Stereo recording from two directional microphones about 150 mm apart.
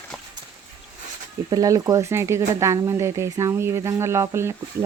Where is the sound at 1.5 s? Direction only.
25° right (ahead or behind).